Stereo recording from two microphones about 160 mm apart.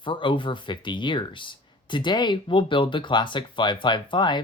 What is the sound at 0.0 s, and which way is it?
Speech, 30° left (ahead or behind).